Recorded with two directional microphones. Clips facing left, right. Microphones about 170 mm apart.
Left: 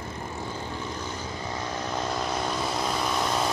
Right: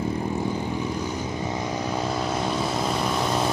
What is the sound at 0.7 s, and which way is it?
Vehicle, 15° right (ahead or behind).